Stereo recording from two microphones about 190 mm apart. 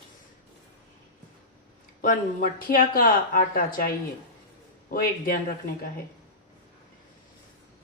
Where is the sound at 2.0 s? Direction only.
45° left (ahead or behind).